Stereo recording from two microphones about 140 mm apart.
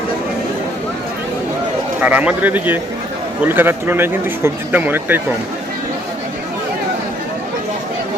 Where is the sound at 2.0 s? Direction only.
10° right (ahead or behind).